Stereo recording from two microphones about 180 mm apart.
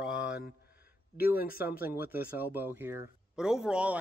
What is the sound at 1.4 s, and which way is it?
Speech, 55° left (ahead or behind).